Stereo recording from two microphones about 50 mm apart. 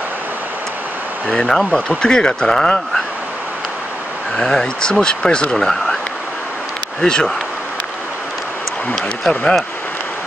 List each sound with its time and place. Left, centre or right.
1.2 s speech: centre
4.4 s speech: centre
7.0 s speech: centre
9.3 s speech: centre